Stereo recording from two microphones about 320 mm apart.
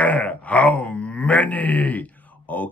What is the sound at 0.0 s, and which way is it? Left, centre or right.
Groan, centre.